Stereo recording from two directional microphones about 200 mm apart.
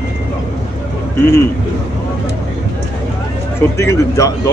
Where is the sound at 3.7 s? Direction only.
15° left (ahead or behind).